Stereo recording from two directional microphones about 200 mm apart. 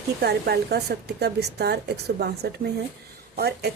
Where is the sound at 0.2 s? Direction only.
55° right (ahead or behind).